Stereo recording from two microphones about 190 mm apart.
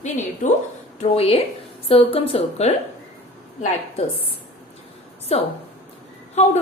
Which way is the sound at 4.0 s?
35° left (ahead or behind).